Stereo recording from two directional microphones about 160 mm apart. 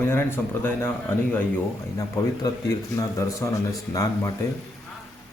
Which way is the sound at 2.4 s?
25° left (ahead or behind).